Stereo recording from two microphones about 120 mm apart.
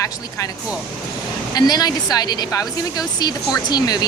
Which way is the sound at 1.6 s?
35° left (ahead or behind).